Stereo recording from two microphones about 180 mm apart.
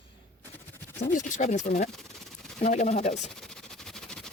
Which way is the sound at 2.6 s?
40° left (ahead or behind).